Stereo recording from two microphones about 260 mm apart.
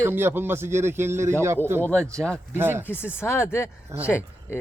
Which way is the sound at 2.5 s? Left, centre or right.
Centre.